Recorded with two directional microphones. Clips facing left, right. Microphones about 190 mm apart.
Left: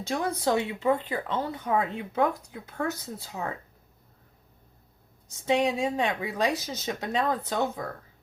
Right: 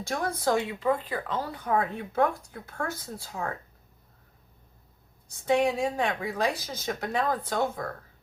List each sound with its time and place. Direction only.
0.1 s a woman's voice: 25° left (ahead or behind)
5.5 s a woman's voice: 20° left (ahead or behind)